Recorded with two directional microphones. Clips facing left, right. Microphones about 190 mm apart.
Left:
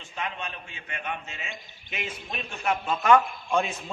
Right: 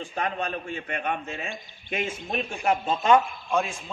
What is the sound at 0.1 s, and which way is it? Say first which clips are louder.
A man's voice: right 4 dB; 45° right (ahead or behind).